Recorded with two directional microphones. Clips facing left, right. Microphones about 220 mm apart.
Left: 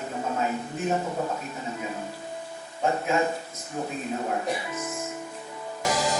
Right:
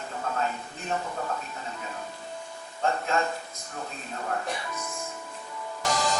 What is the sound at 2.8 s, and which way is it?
Speech, 15° left (ahead or behind).